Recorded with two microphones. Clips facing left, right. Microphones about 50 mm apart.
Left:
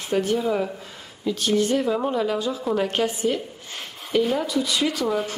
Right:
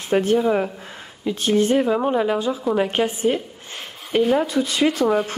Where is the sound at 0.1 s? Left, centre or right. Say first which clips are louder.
Right 4 dB; right.